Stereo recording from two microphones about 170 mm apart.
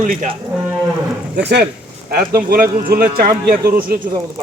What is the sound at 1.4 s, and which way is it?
Speech, 75° right (ahead or behind).